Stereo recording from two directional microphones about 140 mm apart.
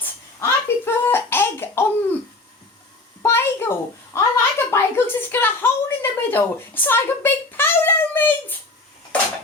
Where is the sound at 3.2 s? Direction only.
15° left (ahead or behind).